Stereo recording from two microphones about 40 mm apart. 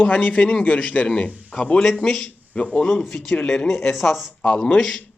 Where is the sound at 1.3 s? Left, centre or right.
Right.